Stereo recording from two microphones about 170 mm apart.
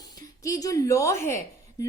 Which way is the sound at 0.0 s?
20° left (ahead or behind).